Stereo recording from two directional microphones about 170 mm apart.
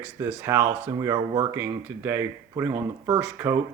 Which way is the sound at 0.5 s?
15° right (ahead or behind).